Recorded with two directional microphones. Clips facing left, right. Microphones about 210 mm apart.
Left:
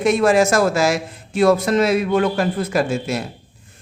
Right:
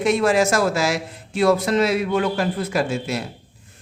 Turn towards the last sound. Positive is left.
turn(degrees=50)  # may be behind; listen again after turning